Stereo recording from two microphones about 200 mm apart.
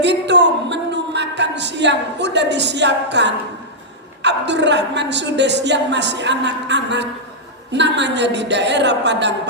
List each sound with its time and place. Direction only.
0.0 s a woman's voice: 60° right (ahead or behind)